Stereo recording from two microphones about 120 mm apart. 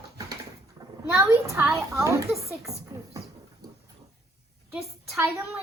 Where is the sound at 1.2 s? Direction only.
25° right (ahead or behind).